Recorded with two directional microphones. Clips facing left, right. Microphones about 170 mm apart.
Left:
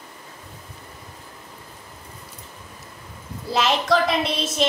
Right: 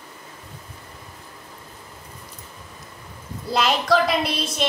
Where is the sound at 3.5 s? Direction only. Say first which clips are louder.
Even; centre (ahead or behind).